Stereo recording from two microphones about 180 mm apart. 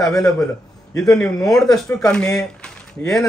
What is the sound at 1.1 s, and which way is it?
Speech, 10° left (ahead or behind).